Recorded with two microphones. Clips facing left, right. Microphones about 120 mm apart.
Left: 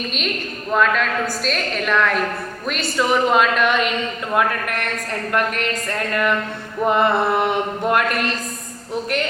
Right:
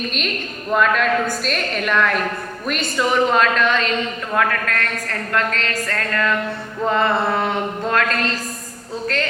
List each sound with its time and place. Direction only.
0.7 s a woman's voice: centre (ahead or behind); by 8.3 s 15° left (ahead or behind)